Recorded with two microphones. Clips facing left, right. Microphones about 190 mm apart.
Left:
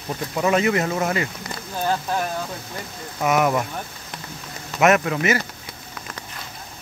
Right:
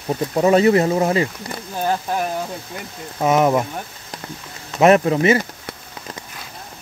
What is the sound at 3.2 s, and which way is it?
Speech, 25° right (ahead or behind).